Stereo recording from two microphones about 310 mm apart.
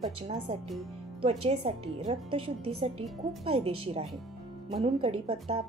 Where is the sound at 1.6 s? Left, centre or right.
Centre.